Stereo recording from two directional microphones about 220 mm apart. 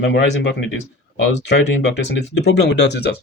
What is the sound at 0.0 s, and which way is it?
Speech, 50° left (ahead or behind).